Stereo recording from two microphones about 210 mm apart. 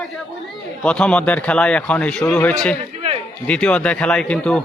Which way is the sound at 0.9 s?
5° left (ahead or behind).